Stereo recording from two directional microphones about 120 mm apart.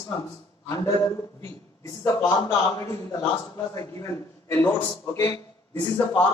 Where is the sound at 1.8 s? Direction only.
25° left (ahead or behind).